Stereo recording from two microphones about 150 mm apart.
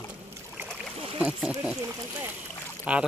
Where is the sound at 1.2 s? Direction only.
5° right (ahead or behind).